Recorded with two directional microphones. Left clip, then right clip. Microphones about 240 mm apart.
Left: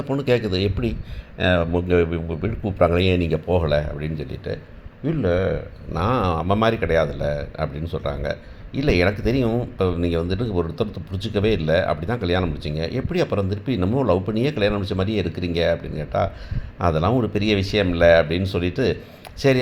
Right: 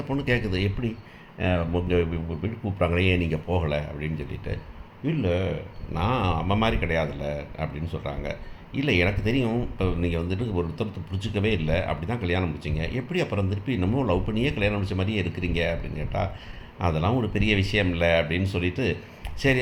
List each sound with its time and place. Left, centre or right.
0.1 s a man's voice: centre